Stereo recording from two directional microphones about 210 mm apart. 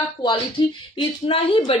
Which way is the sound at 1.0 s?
25° left (ahead or behind).